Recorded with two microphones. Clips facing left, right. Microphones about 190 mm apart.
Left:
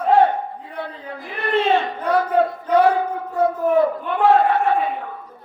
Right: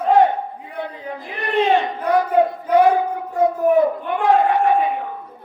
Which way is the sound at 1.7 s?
15° right (ahead or behind).